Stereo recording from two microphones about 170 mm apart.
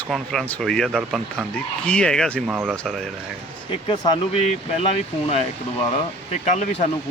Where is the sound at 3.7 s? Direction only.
30° left (ahead or behind).